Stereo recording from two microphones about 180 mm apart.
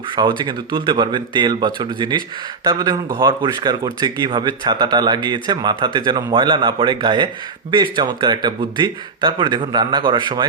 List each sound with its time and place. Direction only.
0.2 s speech: 25° right (ahead or behind)